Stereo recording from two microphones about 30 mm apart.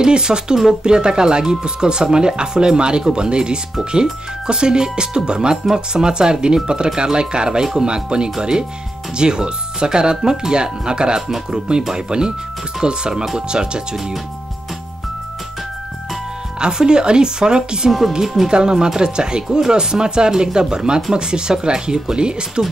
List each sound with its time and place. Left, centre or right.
0.0 s speech: right
16.5 s speech: right
18.2 s speech: centre
18.5 s speech: right